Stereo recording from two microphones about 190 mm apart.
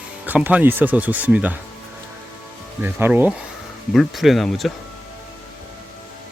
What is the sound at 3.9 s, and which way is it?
Speech, centre (ahead or behind).